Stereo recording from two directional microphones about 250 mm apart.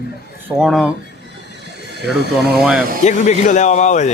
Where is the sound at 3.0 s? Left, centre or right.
Left.